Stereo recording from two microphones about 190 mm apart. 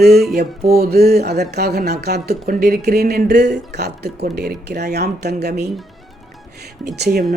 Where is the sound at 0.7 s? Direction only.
55° right (ahead or behind).